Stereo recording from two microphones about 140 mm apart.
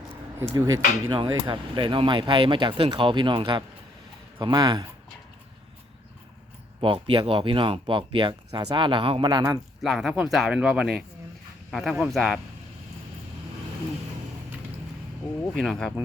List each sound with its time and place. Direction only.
0.5 s speech: 25° right (ahead or behind)
6.8 s speech: 40° right (ahead or behind)
9.8 s speech: centre (ahead or behind)
15.5 s speech: centre (ahead or behind)